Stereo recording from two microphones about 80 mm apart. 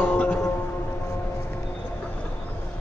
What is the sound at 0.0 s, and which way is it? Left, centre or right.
Music, centre.